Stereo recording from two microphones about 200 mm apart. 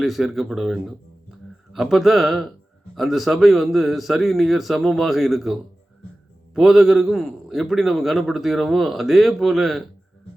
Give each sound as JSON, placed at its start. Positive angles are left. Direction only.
{"t": 0.0, "sound": "a man's voice", "side_deg": 0}